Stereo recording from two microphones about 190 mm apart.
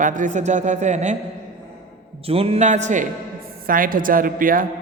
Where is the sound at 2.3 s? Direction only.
30° right (ahead or behind).